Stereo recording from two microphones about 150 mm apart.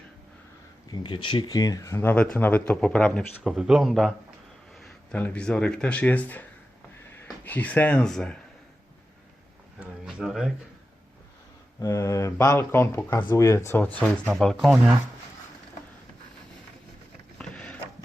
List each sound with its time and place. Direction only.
0.9 s speech: 30° left (ahead or behind); by 3.2 s 5° left (ahead or behind)
3.4 s speech: 5° right (ahead or behind)
7.4 s speech: 10° left (ahead or behind)
9.8 s speech: 5° right (ahead or behind)
11.8 s speech: 20° left (ahead or behind)
14.0 s speech: centre (ahead or behind)
17.3 s a sound: 5° left (ahead or behind)